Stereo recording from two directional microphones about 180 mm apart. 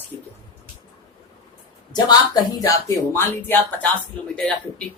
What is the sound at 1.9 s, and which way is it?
Speech, 25° left (ahead or behind).